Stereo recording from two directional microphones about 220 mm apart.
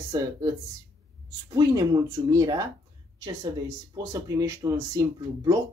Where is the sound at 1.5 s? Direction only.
15° right (ahead or behind).